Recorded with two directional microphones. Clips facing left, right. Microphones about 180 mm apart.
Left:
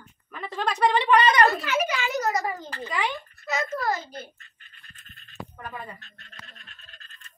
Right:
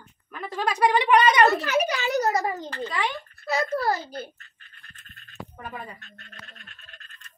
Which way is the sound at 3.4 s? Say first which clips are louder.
Right 3 dB; 35° right (ahead or behind).